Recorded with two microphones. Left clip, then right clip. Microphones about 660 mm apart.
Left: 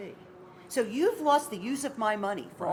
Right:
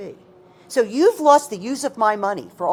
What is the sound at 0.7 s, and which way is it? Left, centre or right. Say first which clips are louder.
A woman's voice: right 11 dB; right.